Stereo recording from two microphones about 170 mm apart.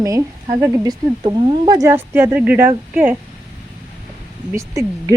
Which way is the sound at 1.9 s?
10° right (ahead or behind).